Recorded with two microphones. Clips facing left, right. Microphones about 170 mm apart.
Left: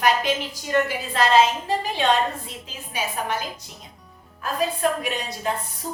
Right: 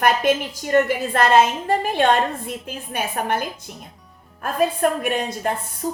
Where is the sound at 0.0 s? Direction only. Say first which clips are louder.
Right 3 dB; 55° right (ahead or behind).